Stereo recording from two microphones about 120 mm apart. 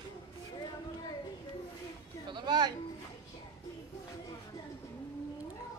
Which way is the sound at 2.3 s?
35° right (ahead or behind).